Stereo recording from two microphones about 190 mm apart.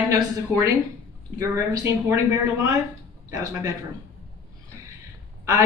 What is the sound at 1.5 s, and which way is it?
Speech, 15° right (ahead or behind).